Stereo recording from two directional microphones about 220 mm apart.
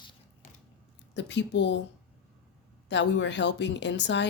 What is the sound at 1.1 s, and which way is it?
Speech, 55° left (ahead or behind).